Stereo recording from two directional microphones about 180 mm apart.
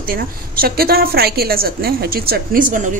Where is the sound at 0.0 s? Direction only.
55° right (ahead or behind).